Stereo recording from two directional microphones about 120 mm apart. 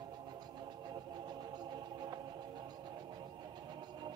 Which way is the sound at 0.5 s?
35° right (ahead or behind).